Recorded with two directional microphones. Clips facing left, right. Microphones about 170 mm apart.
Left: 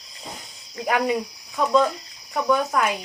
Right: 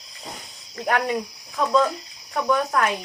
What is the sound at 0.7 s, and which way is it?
Cricket, 5° left (ahead or behind).